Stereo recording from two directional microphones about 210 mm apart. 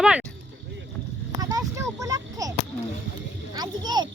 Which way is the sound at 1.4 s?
15° right (ahead or behind).